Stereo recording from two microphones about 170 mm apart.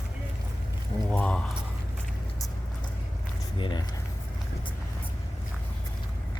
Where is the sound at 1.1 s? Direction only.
10° left (ahead or behind).